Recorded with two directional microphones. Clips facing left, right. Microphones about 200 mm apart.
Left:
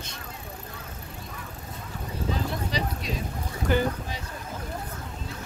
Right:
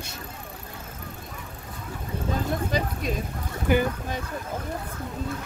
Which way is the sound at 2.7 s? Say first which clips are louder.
Right 3 dB; 50° right (ahead or behind).